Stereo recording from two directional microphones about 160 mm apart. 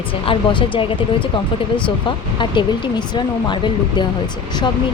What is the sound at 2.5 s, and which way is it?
Speech, 30° left (ahead or behind).